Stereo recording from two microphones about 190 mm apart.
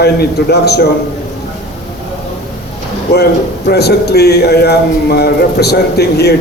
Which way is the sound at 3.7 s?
60° left (ahead or behind).